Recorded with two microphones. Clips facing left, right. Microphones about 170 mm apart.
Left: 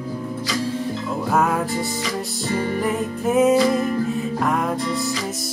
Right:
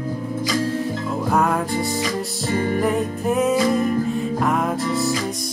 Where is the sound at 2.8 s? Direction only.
Centre (ahead or behind).